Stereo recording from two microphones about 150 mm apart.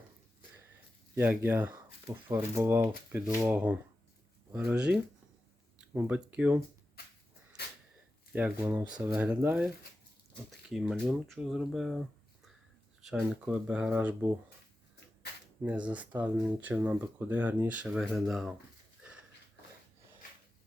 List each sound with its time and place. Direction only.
1.1 s speech: 15° right (ahead or behind)
8.3 s speech: 10° right (ahead or behind)
10.7 s speech: centre (ahead or behind)
15.6 s speech: 10° right (ahead or behind)